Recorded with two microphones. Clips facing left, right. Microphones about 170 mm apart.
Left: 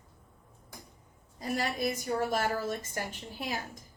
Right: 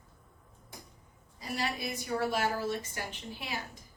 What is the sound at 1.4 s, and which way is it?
A woman's voice, 45° left (ahead or behind).